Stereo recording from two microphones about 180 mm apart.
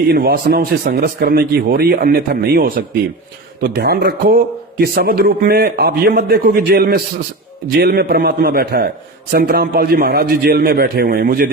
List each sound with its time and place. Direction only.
0.1 s a man's voice: 60° right (ahead or behind)